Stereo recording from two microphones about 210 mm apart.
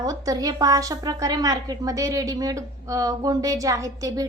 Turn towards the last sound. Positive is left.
turn(degrees=-15)  # may be behind; listen again after turning